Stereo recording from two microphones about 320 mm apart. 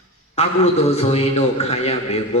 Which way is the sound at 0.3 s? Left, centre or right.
Centre.